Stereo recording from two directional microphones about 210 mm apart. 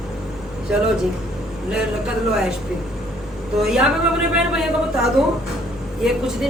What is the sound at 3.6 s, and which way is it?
A woman's voice, centre (ahead or behind).